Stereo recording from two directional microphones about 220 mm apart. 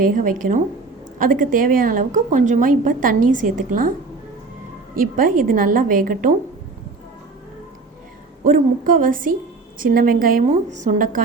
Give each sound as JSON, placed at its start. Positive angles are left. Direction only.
{"t": 0.0, "sound": "a woman's voice", "side_deg": -40}
{"t": 4.9, "sound": "a woman's voice", "side_deg": -40}
{"t": 8.4, "sound": "a woman's voice", "side_deg": -35}